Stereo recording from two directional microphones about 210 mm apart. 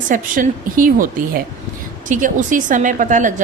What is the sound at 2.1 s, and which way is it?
A woman's voice, 40° right (ahead or behind).